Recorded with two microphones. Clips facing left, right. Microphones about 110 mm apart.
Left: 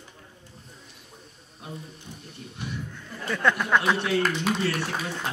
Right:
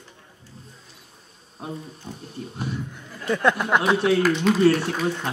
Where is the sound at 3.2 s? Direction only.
15° right (ahead or behind).